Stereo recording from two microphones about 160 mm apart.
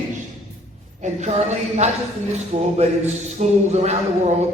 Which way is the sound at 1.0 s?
45° right (ahead or behind).